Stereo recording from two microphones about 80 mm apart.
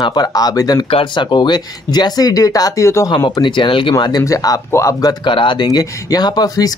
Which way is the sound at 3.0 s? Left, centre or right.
Left.